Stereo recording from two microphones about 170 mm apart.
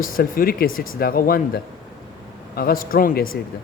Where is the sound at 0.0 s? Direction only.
55° left (ahead or behind).